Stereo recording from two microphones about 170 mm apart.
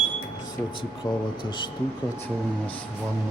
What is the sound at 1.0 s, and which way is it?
Speech, 25° left (ahead or behind).